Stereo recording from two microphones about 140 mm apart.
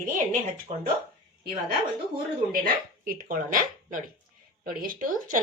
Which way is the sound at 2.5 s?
85° right.